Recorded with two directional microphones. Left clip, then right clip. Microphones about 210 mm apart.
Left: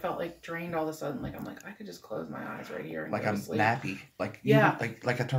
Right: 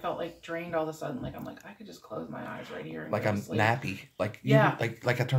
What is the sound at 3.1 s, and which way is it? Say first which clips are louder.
Speech: right 2 dB; 50° right (ahead or behind).